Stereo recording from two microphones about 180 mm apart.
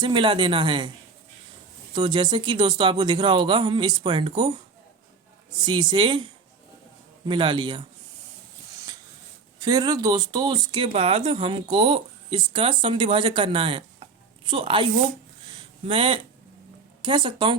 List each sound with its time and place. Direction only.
0.0 s speech: 25° right (ahead or behind)
1.9 s speech: 25° right (ahead or behind)
5.6 s speech: 25° right (ahead or behind)
9.6 s speech: 20° right (ahead or behind)
15.5 s a sound: 30° right (ahead or behind)
17.0 s speech: 25° right (ahead or behind)